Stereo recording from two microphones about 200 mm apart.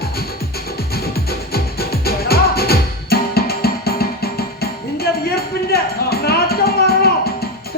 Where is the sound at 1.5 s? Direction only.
50° left (ahead or behind).